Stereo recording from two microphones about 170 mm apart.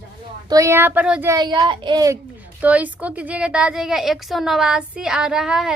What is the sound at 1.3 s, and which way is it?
Speech, 25° right (ahead or behind).